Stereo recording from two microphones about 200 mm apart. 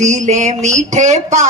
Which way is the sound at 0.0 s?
35° right (ahead or behind).